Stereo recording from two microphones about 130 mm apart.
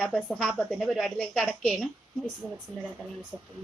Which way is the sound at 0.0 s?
Centre (ahead or behind).